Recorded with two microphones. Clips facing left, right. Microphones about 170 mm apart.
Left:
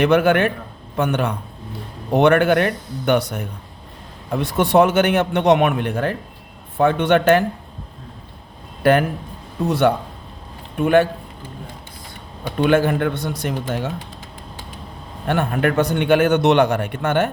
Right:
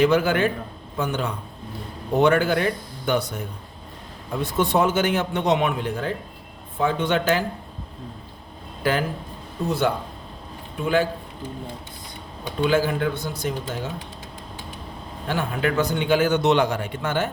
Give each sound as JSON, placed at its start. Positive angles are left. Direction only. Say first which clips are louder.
{"t": 0.0, "sound": "a man's voice", "louder": "left 4 dB", "side_deg": 65}
{"t": 8.8, "sound": "a man's voice", "louder": "left 7 dB", "side_deg": 60}
{"t": 12.5, "sound": "a man's voice", "louder": "left 4 dB", "side_deg": 60}
{"t": 15.3, "sound": "a man's voice", "louder": "left 5 dB", "side_deg": 55}